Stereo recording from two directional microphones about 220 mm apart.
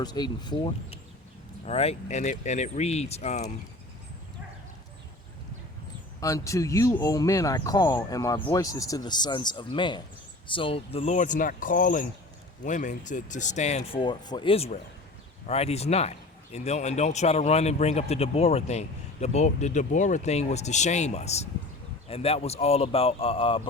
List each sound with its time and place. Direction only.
0.0 s a man's voice: 20° left (ahead or behind)
6.1 s a man's voice: 15° left (ahead or behind)